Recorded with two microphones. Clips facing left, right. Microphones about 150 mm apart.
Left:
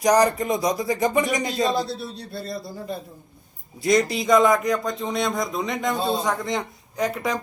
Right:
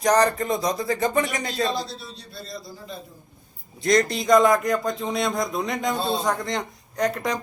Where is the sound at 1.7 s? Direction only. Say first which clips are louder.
Left 5 dB; 60° left (ahead or behind).